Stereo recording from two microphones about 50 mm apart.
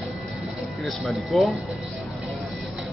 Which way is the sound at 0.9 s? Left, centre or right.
Centre.